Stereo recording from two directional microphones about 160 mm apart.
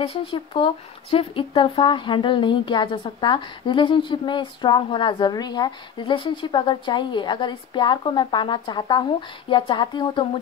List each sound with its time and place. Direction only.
0.0 s speech: 35° left (ahead or behind)